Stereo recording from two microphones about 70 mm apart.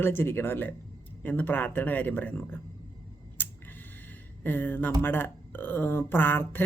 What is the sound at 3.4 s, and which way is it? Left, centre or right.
Tick-tock, left.